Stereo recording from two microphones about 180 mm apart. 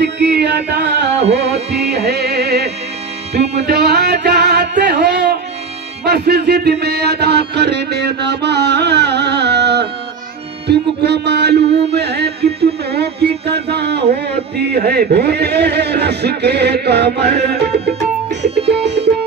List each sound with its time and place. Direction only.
0.0 s music: 65° right (ahead or behind)
18.7 s music: 70° right (ahead or behind)